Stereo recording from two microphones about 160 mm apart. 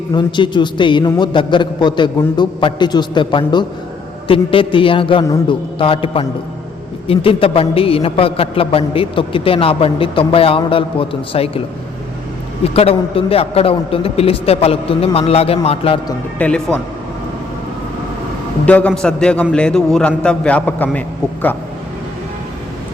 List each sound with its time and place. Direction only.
0.1 s a man's voice: 30° left (ahead or behind)
12.6 s a man's voice: 40° left (ahead or behind)
16.4 s speech: 5° left (ahead or behind)
18.6 s a man's voice: 10° left (ahead or behind)